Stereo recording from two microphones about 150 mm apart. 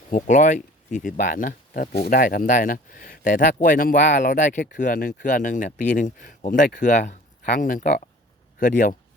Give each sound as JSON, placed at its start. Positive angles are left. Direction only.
{"t": 0.1, "sound": "speech", "side_deg": 60}